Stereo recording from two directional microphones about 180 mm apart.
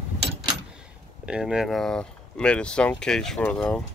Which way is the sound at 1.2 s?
5° right (ahead or behind).